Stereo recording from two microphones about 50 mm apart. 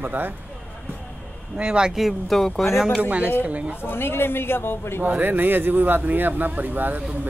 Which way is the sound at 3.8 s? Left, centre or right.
Left.